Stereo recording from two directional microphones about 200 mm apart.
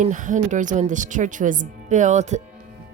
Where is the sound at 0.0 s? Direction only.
40° right (ahead or behind).